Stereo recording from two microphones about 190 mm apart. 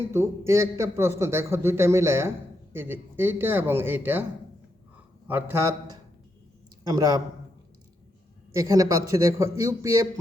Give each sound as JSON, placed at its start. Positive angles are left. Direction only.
{"t": 0.1, "sound": "a man's voice", "side_deg": -15}
{"t": 5.3, "sound": "a man's voice", "side_deg": -15}
{"t": 8.5, "sound": "a man's voice", "side_deg": -20}